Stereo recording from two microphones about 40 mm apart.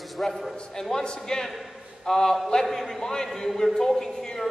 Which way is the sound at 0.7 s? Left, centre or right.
Centre.